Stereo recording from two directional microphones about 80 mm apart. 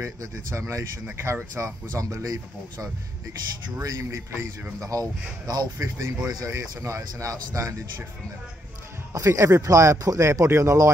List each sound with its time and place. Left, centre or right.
0.0 s speech: right
4.4 s speech: right
9.1 s speech: right